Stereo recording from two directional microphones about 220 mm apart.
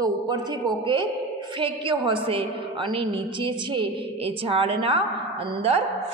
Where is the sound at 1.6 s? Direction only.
25° right (ahead or behind).